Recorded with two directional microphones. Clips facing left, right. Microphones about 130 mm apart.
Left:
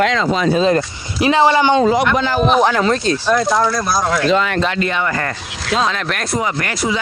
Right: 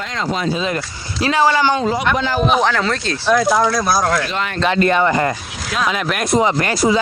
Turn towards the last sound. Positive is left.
turn(degrees=-35)  # may be behind; listen again after turning